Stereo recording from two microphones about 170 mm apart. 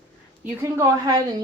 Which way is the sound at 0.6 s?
15° right (ahead or behind).